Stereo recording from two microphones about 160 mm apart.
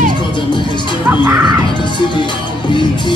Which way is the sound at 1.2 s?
30° right (ahead or behind).